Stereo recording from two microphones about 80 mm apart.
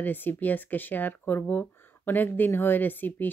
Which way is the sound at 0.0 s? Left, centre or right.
Left.